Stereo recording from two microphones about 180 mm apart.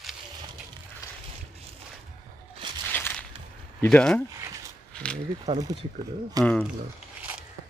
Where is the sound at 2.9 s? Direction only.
10° left (ahead or behind).